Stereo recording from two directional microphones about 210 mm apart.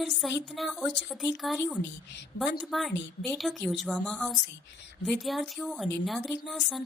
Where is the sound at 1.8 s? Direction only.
55° left (ahead or behind).